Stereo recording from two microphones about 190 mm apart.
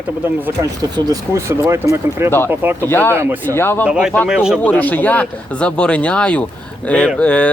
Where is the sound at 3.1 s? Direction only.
10° right (ahead or behind).